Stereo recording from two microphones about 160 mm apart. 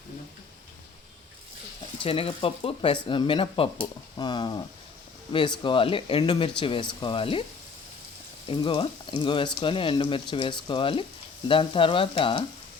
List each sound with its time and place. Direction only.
2.0 s speech: 35° left (ahead or behind)
8.4 s speech: 30° left (ahead or behind)